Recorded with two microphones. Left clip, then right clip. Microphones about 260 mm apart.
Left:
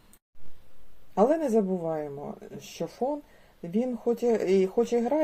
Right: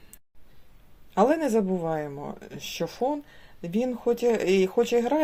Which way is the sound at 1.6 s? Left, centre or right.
Right.